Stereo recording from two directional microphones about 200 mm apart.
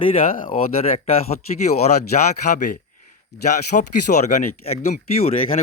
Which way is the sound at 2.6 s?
40° left (ahead or behind).